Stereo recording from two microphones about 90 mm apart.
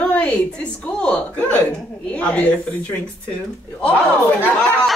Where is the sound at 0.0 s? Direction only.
15° left (ahead or behind).